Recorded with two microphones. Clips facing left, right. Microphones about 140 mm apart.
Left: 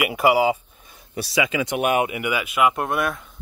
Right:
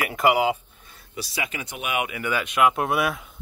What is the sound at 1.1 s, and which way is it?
Speech, 80° left.